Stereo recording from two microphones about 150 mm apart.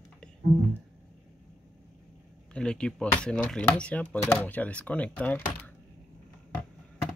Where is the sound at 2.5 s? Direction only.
5° left (ahead or behind).